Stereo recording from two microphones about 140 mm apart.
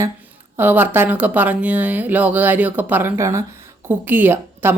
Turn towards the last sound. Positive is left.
turn(degrees=-15)  # may be behind; listen again after turning